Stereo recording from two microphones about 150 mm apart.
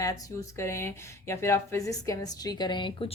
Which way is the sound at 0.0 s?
20° left (ahead or behind).